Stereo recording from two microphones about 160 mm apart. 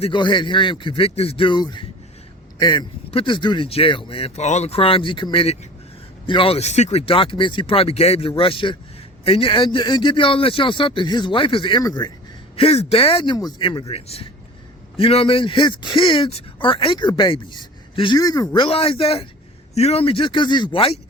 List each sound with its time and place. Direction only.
0.0 s speech: 30° left (ahead or behind)
12.5 s speech: 40° left (ahead or behind)